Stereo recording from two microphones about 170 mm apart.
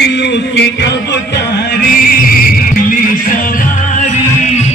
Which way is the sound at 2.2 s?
60° left (ahead or behind).